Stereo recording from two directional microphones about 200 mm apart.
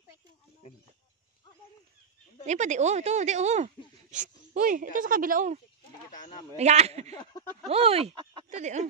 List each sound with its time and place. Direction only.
2.4 s speech: 35° right (ahead or behind)